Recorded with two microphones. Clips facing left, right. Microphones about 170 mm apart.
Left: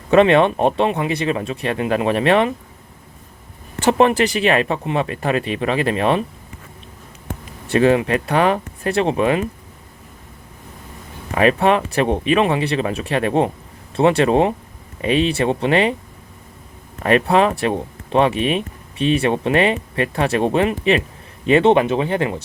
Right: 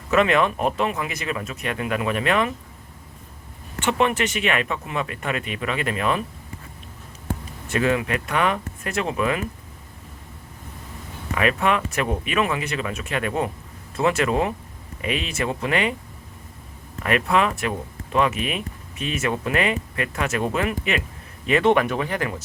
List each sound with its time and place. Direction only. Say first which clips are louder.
0.1 s speech: left 7 dB; 30° left (ahead or behind)
3.8 s speech: left 7 dB; 35° left (ahead or behind)
7.7 s speech: left 7 dB; 30° left (ahead or behind)
11.3 s speech: left 6 dB; 35° left (ahead or behind)
17.0 s speech: left 6 dB; 35° left (ahead or behind)